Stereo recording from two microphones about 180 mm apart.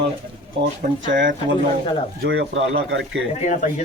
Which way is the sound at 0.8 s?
45° right (ahead or behind).